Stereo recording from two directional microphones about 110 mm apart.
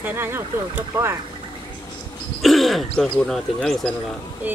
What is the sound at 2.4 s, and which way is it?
Throat clearing, centre (ahead or behind).